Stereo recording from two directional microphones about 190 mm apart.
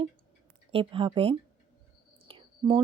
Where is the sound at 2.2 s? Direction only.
25° right (ahead or behind).